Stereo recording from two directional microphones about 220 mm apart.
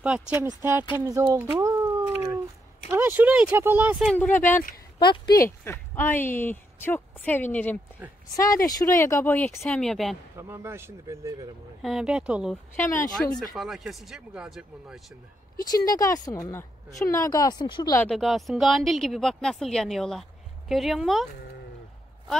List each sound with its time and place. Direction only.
0.0 s speech: 5° right (ahead or behind)
0.9 s a sound: 10° right (ahead or behind)
2.9 s speech: 10° right (ahead or behind)
4.9 s a woman's voice: 20° left (ahead or behind); by 10.1 s centre (ahead or behind)
10.3 s speech: 10° right (ahead or behind)
12.7 s a woman's voice: 10° left (ahead or behind)
13.6 s speech: centre (ahead or behind)
15.7 s a woman's voice: 15° left (ahead or behind)
18.0 s speech: centre (ahead or behind)